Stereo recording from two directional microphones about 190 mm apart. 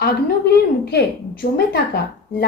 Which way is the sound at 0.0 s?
60° left (ahead or behind).